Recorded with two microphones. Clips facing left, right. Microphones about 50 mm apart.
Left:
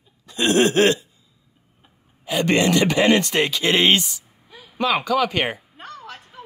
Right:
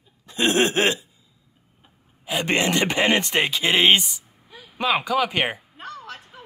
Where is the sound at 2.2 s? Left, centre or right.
Right.